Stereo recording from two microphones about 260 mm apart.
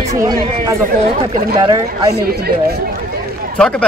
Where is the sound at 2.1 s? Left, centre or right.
Right.